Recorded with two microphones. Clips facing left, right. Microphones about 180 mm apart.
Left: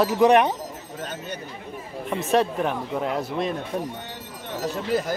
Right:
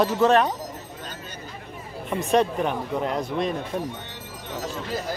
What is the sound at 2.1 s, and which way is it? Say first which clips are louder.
Speech: even; centre (ahead or behind).